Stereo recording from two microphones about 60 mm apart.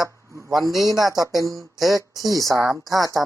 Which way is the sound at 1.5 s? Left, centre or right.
Right.